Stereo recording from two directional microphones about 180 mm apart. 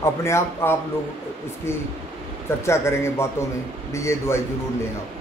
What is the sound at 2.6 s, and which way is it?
A man's voice, 15° left (ahead or behind).